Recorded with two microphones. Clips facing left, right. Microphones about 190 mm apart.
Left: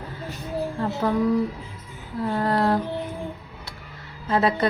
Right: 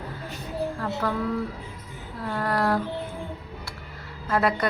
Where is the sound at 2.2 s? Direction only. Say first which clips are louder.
Left 3 dB; 25° left (ahead or behind).